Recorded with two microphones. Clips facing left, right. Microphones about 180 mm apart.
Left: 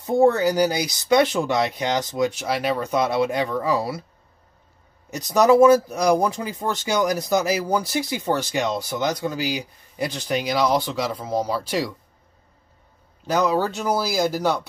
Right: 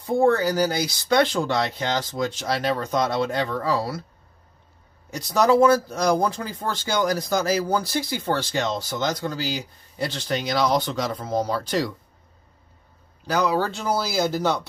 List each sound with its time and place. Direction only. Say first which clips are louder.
0.0 s speech: left 2 dB; 20° left (ahead or behind)
5.1 s speech: left 3 dB; 15° left (ahead or behind)
13.6 s speech: left 2 dB; 15° left (ahead or behind)